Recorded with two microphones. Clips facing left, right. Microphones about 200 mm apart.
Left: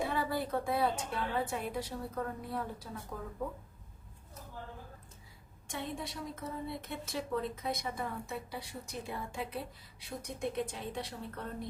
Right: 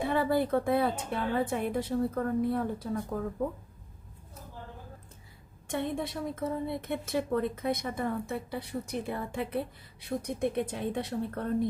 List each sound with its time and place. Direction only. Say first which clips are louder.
0.1 s a woman's voice: right 7 dB; 55° right (ahead or behind)
5.6 s a woman's voice: right 8 dB; 55° right (ahead or behind)